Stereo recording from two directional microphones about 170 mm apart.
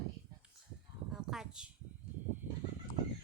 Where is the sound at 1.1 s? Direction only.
5° right (ahead or behind).